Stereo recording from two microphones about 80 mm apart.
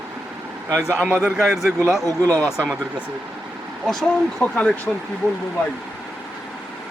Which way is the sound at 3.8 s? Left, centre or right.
Centre.